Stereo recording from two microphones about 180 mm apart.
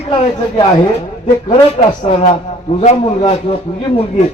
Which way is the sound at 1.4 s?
35° left (ahead or behind).